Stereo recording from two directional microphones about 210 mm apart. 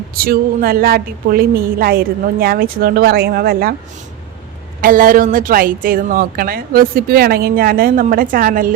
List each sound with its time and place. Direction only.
0.1 s speech: 45° right (ahead or behind)
4.8 s speech: 40° right (ahead or behind)